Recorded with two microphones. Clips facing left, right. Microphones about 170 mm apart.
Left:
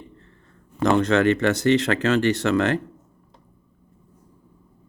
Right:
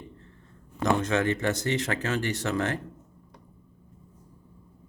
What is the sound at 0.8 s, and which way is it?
Speech, 65° left (ahead or behind).